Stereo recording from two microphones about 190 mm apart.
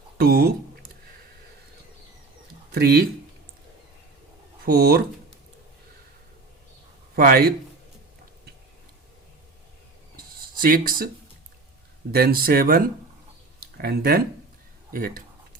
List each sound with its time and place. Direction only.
0.2 s a sound: 50° right (ahead or behind)
2.7 s speech: 55° right (ahead or behind)
4.6 s speech: 55° right (ahead or behind)
7.2 s speech: 55° right (ahead or behind)
10.2 s a sound: 50° right (ahead or behind)
12.1 s speech: 50° right (ahead or behind)